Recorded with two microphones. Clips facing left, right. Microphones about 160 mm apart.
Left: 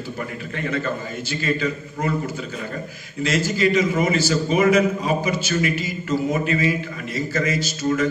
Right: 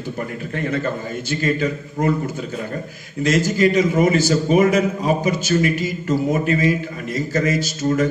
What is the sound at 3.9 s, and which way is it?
A man's voice, 50° right (ahead or behind).